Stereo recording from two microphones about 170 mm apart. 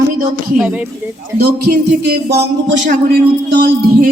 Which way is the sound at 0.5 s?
10° right (ahead or behind).